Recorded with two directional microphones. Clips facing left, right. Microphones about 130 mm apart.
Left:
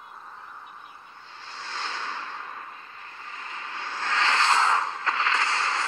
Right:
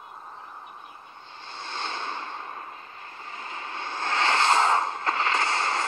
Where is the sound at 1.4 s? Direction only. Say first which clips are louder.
Right 1 dB; 25° right (ahead or behind).